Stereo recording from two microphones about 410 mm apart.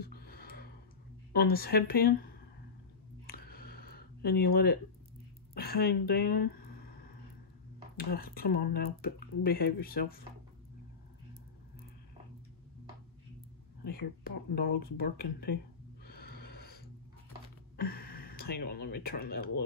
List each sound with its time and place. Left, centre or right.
0.0 s a sound: left
1.3 s speech: left
3.3 s a sound: left
5.5 s speech: left
8.0 s speech: left
13.8 s speech: left
16.1 s snort: left
17.7 s speech: left